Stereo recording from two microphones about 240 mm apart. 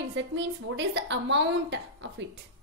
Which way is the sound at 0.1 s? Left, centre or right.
Right.